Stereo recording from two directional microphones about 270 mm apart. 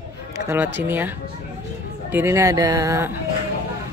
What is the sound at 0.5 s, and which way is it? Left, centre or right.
Speech, centre.